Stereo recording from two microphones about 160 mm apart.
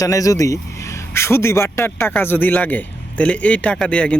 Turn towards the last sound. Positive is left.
turn(degrees=5)  # may be behind; listen again after turning